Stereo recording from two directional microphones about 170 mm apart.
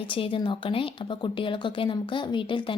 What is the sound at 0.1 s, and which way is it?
Speech, 30° left (ahead or behind).